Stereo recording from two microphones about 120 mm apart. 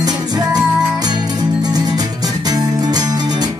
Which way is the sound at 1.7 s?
35° right (ahead or behind).